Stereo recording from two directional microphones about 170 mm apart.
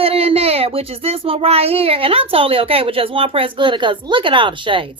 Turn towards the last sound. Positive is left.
turn(degrees=-30)  # may be behind; listen again after turning